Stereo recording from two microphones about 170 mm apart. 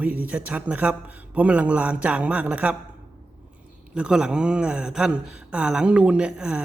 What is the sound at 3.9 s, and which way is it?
Speech, 5° right (ahead or behind).